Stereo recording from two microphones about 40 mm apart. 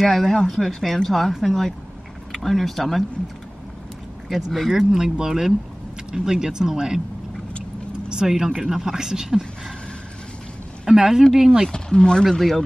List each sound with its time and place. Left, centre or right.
0.0 s speech: centre
4.6 s speech: centre
8.1 s speech: centre
10.9 s speech: centre
11.7 s speech: centre
12.3 s speech: centre